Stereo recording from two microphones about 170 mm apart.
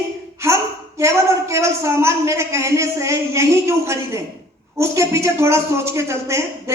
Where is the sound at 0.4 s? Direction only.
15° right (ahead or behind).